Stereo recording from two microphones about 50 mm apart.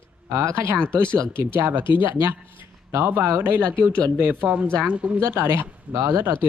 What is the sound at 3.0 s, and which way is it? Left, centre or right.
Speech, right.